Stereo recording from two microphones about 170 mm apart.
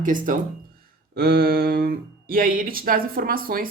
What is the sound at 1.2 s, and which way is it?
Speech, 60° right (ahead or behind).